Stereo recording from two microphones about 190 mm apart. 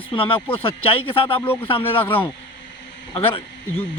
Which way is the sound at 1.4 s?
10° left (ahead or behind).